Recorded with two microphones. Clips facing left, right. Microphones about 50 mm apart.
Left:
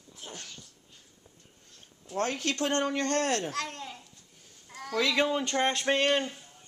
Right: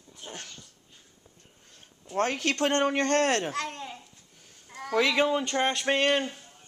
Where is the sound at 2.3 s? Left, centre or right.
Right.